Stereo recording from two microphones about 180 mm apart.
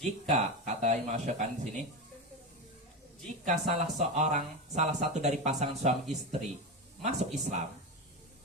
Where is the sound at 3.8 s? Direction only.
40° right (ahead or behind).